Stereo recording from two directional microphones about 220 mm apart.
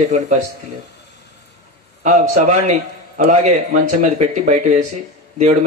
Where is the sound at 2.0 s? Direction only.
35° right (ahead or behind).